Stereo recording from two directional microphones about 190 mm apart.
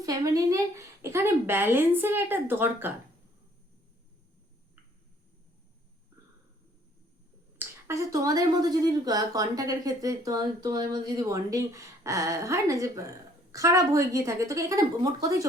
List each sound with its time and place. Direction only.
0.0 s speech: 20° right (ahead or behind)
7.6 s speech: 15° right (ahead or behind)